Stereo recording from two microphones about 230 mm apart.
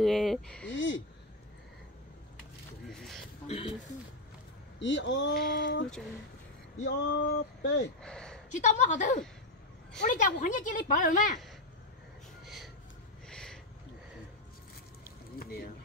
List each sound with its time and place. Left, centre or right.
0.0 s speech: centre
0.7 s speech: left
2.9 s a sound: centre
3.4 s speech: left
4.7 s speech: left
6.8 s speech: left
8.0 s speech: centre
8.5 s a woman's voice: left
12.4 s a sound: centre
15.3 s speech: left